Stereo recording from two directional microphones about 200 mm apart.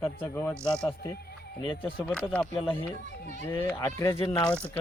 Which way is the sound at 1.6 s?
25° left (ahead or behind).